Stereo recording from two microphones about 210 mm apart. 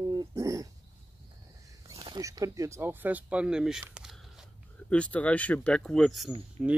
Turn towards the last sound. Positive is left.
turn(degrees=-5)  # may be behind; listen again after turning